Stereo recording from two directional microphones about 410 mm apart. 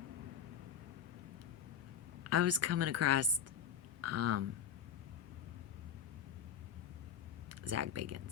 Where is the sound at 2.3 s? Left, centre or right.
Right.